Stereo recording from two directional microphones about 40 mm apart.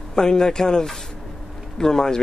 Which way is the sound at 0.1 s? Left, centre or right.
Centre.